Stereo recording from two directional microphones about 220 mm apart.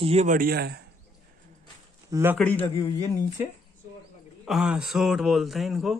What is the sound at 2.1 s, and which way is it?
Speech, 10° right (ahead or behind).